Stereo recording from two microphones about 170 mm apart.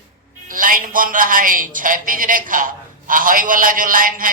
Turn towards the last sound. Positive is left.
turn(degrees=-55)  # may be behind; listen again after turning